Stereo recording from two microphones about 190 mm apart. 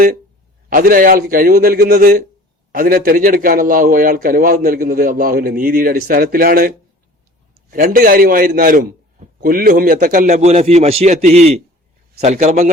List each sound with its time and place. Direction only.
0.7 s a man's voice: 50° right (ahead or behind)